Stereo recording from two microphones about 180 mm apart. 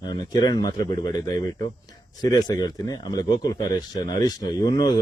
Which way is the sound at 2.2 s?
20° left (ahead or behind).